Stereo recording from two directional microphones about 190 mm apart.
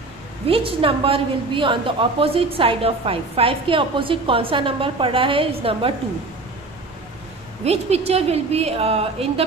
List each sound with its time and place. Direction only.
0.5 s a woman's voice: 30° right (ahead or behind)
7.6 s a woman's voice: 35° right (ahead or behind)